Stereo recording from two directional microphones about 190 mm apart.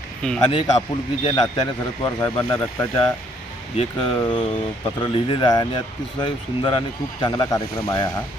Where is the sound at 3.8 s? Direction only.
25° left (ahead or behind).